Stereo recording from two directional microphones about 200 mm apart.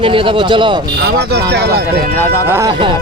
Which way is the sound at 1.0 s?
55° right (ahead or behind).